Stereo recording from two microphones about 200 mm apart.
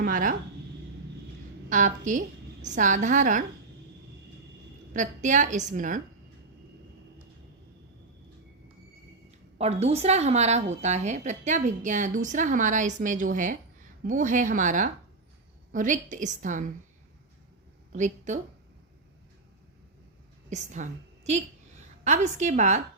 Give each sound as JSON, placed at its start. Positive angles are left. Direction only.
{"t": 0.0, "sound": "speech", "side_deg": -45}
{"t": 1.7, "sound": "a woman's voice", "side_deg": -40}
{"t": 4.9, "sound": "a woman's voice", "side_deg": -40}
{"t": 9.6, "sound": "a woman's voice", "side_deg": -30}
{"t": 17.9, "sound": "a woman's voice", "side_deg": -35}
{"t": 20.5, "sound": "a woman's voice", "side_deg": -35}